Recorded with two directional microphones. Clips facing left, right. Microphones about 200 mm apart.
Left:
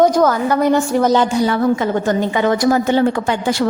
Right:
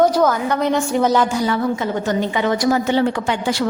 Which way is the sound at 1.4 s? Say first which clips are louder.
Left 4 dB; 50° left (ahead or behind).